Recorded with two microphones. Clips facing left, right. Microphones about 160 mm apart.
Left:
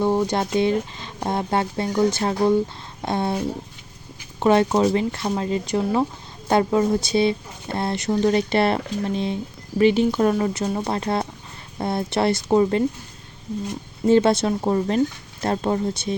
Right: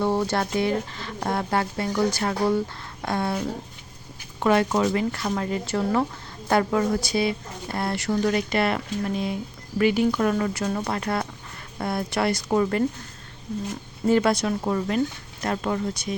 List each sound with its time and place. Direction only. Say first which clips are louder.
0.0 s a woman's voice: left 3 dB; 15° left (ahead or behind)
14.1 s a woman's voice: left 4 dB; 25° left (ahead or behind)